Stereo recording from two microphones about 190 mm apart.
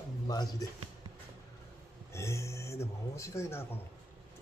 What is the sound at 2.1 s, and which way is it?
Speech, 15° left (ahead or behind).